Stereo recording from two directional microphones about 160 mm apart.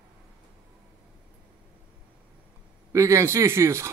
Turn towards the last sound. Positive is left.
turn(degrees=-15)  # may be behind; listen again after turning